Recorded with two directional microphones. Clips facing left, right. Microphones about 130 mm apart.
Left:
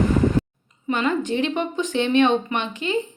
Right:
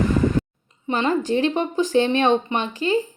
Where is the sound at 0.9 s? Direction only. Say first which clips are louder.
Right 1 dB; 35° right (ahead or behind).